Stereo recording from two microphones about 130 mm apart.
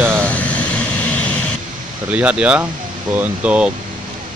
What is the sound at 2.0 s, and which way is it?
Speech, 10° right (ahead or behind).